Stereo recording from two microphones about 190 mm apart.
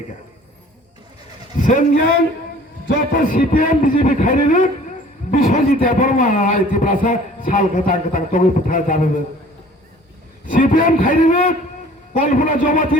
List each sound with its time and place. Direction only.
1.5 s a sound: 40° left (ahead or behind)
3.1 s a man's voice: 45° left (ahead or behind)
10.4 s a man's voice: 45° left (ahead or behind)